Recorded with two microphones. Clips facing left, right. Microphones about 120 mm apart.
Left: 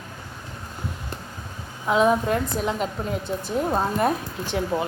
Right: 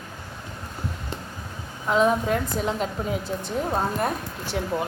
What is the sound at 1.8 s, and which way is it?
A woman's voice, 5° left (ahead or behind).